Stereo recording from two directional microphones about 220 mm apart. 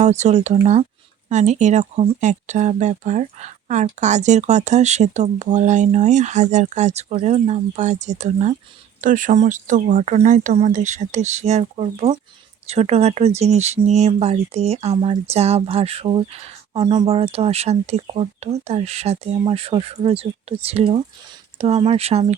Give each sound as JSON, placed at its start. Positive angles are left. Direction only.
{"t": 0.0, "sound": "speech", "side_deg": -30}